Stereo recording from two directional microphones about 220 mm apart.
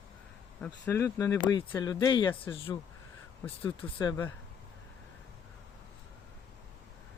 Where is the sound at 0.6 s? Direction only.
10° left (ahead or behind).